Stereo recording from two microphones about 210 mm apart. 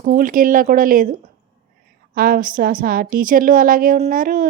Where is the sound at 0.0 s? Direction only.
40° right (ahead or behind).